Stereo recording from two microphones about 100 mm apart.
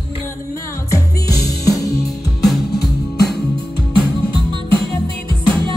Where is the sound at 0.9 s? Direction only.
35° left (ahead or behind).